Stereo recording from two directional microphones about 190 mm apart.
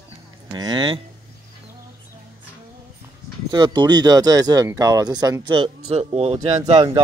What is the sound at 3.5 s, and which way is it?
Speech, 25° right (ahead or behind).